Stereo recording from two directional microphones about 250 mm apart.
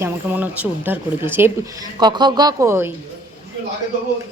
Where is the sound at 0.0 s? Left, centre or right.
Centre.